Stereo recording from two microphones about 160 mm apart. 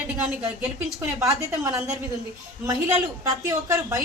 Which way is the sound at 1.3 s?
20° right (ahead or behind).